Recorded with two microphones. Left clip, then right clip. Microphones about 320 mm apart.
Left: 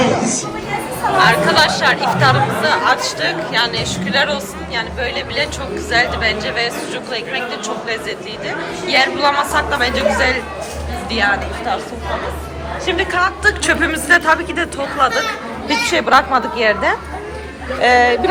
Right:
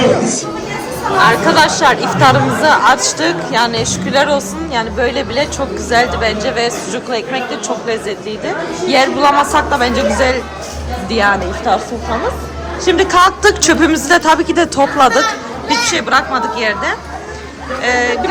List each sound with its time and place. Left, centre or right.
1.3 s speech: centre
8.4 s speech: centre
15.7 s a woman's voice: centre